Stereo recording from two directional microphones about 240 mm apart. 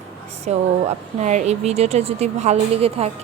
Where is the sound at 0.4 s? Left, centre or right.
Right.